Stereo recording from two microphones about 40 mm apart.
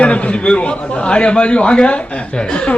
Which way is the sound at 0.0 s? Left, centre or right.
Left.